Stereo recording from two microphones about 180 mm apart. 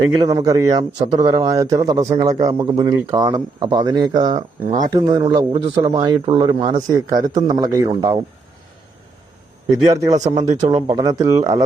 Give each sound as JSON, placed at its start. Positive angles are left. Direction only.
{"t": 0.2, "sound": "speech", "side_deg": -20}
{"t": 10.2, "sound": "speech", "side_deg": -40}
{"t": 11.0, "sound": "speech", "side_deg": -20}